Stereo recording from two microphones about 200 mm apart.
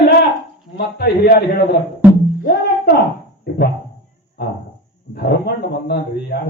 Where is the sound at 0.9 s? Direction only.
55° left (ahead or behind).